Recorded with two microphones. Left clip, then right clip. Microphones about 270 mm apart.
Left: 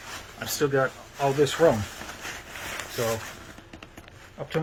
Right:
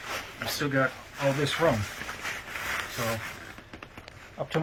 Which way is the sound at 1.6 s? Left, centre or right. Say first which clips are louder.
Left 5 dB; left.